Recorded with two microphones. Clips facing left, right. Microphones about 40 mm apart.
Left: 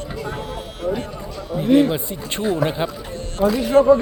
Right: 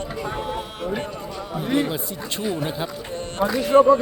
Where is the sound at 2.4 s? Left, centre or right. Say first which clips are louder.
Left 6 dB; left.